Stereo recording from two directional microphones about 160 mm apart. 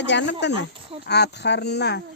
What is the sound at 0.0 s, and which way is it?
Speech, 90° left.